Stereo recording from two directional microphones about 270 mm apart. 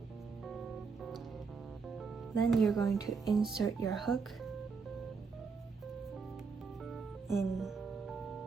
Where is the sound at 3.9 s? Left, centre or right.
Centre.